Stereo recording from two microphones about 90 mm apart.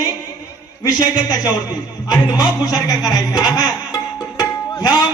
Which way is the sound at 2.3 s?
45° left (ahead or behind).